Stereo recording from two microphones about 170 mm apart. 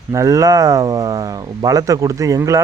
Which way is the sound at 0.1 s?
20° right (ahead or behind).